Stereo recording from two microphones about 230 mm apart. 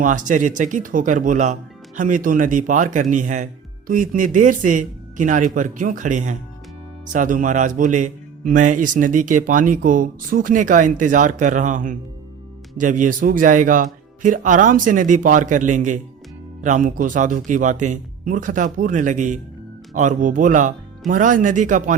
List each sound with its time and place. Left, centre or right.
0.0 s speech: right